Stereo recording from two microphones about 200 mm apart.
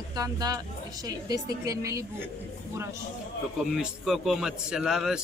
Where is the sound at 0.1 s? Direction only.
20° right (ahead or behind).